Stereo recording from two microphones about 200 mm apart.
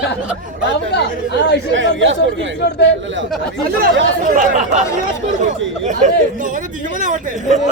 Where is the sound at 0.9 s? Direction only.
60° left (ahead or behind).